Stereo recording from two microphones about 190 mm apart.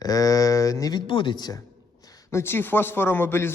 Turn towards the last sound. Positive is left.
turn(degrees=10)  # may be behind; listen again after turning